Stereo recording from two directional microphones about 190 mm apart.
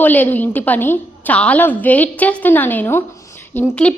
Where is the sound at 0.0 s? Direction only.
10° left (ahead or behind).